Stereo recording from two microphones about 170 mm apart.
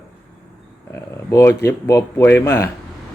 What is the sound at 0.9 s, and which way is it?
A man's voice, 15° left (ahead or behind).